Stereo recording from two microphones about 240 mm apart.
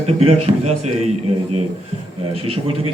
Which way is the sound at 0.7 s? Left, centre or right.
Right.